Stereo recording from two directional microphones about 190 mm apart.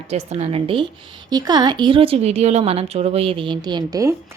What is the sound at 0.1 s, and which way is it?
Speech, 35° right (ahead or behind).